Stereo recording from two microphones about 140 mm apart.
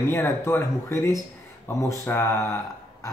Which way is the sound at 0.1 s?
15° left (ahead or behind).